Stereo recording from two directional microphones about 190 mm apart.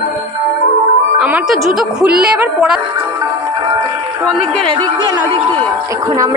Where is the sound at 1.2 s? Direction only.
5° right (ahead or behind).